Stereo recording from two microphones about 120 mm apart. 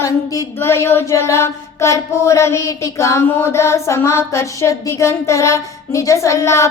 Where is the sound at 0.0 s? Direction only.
25° left (ahead or behind).